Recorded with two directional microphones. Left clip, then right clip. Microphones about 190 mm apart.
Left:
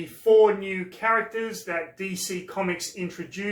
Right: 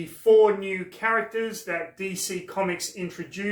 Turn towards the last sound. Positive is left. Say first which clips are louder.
# even
turn(degrees=0)  # may be behind; listen again after turning